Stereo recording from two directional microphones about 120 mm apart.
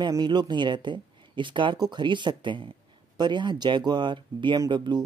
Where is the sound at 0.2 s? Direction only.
40° right (ahead or behind).